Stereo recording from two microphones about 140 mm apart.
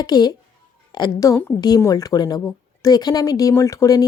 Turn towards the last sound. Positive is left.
turn(degrees=25)  # may be behind; listen again after turning